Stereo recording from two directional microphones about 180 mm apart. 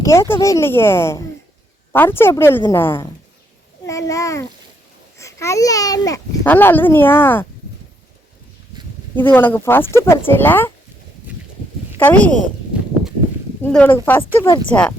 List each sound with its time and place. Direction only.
0.0 s a child's voice: 15° left (ahead or behind)
9.1 s speech: 10° left (ahead or behind)
11.9 s a woman's voice: 10° left (ahead or behind)
13.6 s speech: 10° left (ahead or behind)
14.4 s speech: 25° left (ahead or behind)
14.7 s speech: 5° left (ahead or behind)